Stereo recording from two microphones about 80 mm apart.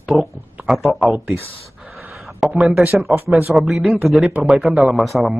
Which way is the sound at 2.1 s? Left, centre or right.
Centre.